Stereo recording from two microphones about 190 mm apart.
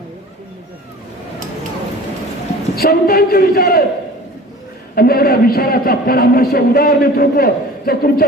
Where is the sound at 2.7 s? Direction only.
55° left (ahead or behind).